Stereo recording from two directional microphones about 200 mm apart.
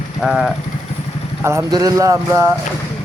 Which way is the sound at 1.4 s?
15° right (ahead or behind).